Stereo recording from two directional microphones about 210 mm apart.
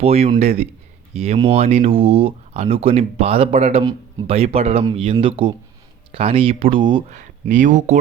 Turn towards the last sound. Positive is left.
turn(degrees=-35)  # may be behind; listen again after turning